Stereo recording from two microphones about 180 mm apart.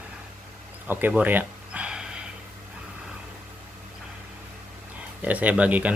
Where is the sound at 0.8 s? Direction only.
10° right (ahead or behind).